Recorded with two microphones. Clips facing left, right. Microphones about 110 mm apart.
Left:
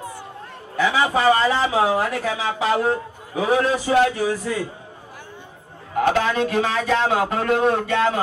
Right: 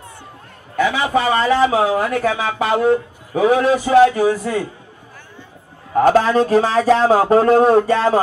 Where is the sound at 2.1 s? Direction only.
50° right (ahead or behind).